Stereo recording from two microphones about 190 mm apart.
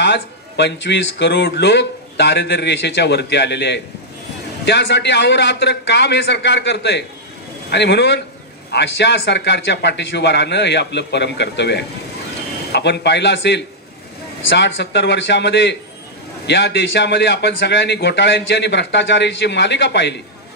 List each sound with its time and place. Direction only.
0.0 s a man's voice: 65° left (ahead or behind)